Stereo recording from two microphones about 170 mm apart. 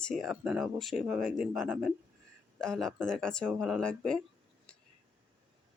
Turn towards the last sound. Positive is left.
turn(degrees=5)  # may be behind; listen again after turning